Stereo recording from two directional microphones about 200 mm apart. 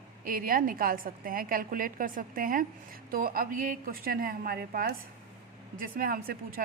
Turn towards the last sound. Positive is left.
turn(degrees=-45)  # may be behind; listen again after turning